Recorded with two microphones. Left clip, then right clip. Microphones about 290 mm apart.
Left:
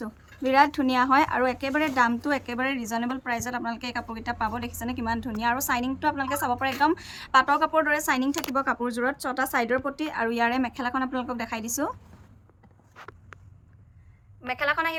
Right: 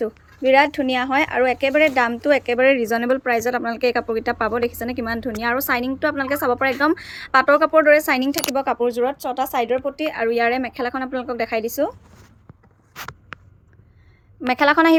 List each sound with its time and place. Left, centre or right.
0.0 s speech: centre
14.5 s a woman's voice: centre